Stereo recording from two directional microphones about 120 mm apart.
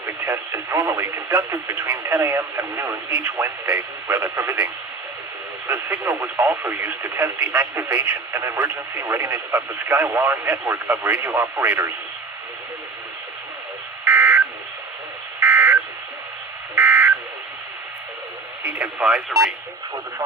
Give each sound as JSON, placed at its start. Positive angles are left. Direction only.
{"t": 0.0, "sound": "speech", "side_deg": -25}
{"t": 14.0, "sound": "buzzer", "side_deg": -15}
{"t": 18.6, "sound": "radio", "side_deg": -10}